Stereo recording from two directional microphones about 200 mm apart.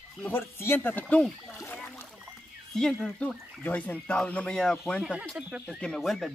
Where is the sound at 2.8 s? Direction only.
5° left (ahead or behind).